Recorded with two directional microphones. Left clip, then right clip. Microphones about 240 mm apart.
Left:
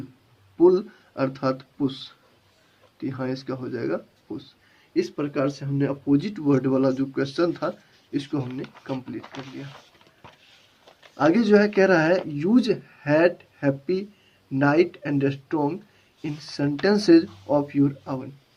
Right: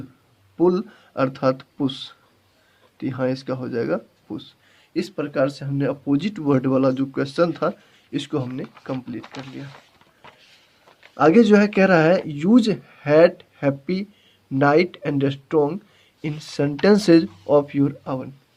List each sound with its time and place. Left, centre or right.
0.6 s speech: right
11.2 s speech: right